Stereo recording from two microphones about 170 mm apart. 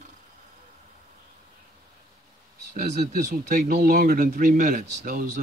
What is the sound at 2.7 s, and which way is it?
Speech, 50° right (ahead or behind).